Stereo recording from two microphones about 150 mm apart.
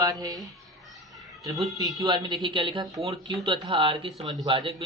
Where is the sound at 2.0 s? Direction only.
30° right (ahead or behind).